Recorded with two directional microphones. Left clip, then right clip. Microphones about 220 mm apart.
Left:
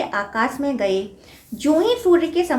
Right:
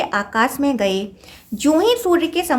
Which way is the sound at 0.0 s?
45° right (ahead or behind).